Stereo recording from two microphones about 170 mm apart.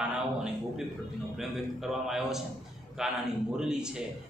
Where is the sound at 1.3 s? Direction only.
Centre (ahead or behind).